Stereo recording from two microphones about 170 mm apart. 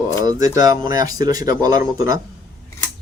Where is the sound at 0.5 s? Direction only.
20° right (ahead or behind).